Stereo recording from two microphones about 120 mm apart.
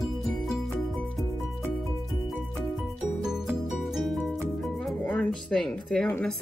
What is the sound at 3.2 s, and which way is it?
Music, 5° right (ahead or behind).